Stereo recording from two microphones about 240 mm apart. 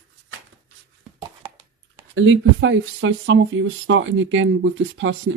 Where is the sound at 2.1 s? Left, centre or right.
Right.